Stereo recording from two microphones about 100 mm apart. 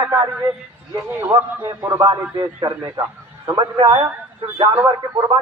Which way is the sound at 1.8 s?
30° right (ahead or behind).